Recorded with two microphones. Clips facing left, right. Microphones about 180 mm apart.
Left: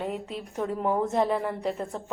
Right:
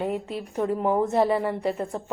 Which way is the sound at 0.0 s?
5° right (ahead or behind).